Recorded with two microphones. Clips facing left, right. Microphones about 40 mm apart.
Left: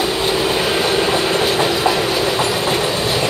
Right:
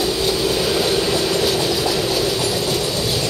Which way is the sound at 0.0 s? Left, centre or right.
Left.